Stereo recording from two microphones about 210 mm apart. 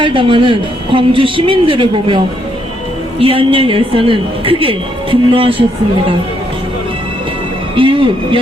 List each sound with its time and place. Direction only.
0.0 s a man's voice: 25° right (ahead or behind)
7.8 s a man's voice: 25° right (ahead or behind)